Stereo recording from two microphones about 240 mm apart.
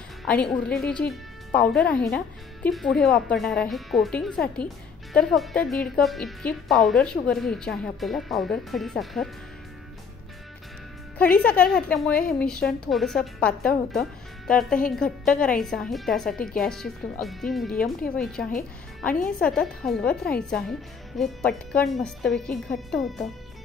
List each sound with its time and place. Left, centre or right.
0.2 s a woman's voice: centre
11.1 s a woman's voice: centre